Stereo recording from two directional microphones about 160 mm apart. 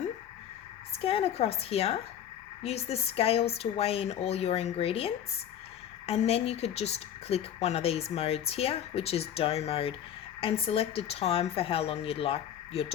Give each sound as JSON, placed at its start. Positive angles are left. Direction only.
{"t": 1.0, "sound": "speech", "side_deg": 40}